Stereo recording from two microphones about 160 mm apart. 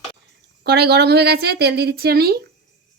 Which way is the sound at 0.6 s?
90° right.